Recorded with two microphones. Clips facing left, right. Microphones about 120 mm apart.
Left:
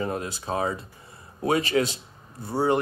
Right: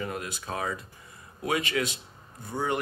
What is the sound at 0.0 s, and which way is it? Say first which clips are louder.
Speech: left 5 dB; 35° left (ahead or behind).